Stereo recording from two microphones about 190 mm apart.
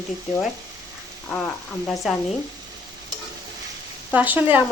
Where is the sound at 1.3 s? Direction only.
10° left (ahead or behind).